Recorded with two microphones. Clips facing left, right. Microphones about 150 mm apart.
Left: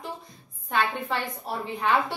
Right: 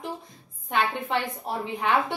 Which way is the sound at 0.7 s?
20° right (ahead or behind).